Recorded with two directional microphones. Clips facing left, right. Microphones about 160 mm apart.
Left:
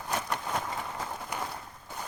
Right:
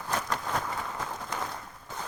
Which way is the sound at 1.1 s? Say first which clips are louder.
Right 1 dB; 10° left (ahead or behind).